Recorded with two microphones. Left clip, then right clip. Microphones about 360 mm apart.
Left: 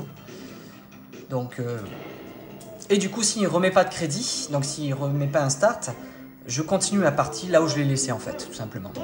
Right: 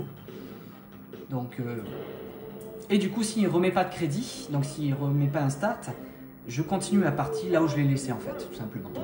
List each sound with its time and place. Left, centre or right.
2.9 s speech: left